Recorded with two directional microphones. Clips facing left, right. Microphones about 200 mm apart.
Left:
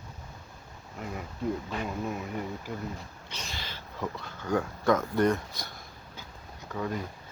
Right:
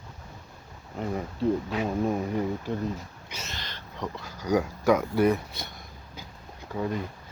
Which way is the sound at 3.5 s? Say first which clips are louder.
Left 1 dB; 5° left (ahead or behind).